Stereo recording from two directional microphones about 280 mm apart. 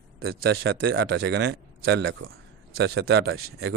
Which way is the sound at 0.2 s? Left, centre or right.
Right.